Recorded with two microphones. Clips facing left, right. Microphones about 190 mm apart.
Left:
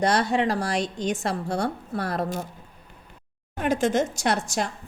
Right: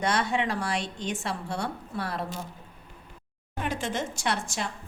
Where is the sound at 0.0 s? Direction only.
35° left (ahead or behind).